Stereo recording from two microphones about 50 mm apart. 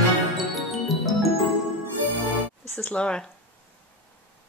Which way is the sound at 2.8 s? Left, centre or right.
Left.